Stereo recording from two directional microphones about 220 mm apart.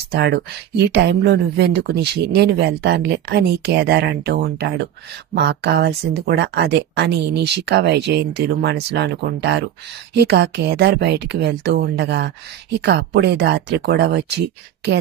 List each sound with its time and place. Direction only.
0.1 s speech: 50° right (ahead or behind)